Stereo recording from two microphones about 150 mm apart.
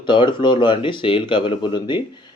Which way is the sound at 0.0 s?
30° left (ahead or behind).